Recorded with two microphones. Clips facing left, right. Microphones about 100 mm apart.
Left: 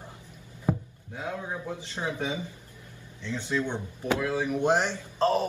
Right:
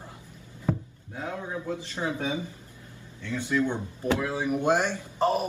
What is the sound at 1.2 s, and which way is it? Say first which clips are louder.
Speech: right 1 dB; 20° left (ahead or behind).